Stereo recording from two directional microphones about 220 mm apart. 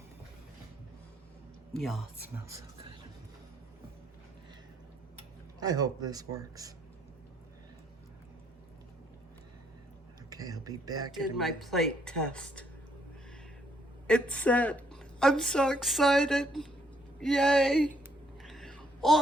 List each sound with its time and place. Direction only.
1.7 s a woman's voice: centre (ahead or behind)
5.5 s speech: 15° right (ahead or behind)
10.2 s speech: 15° right (ahead or behind)
11.1 s a woman's voice: centre (ahead or behind)
14.1 s a woman's voice: 5° left (ahead or behind)
18.4 s a sound: centre (ahead or behind)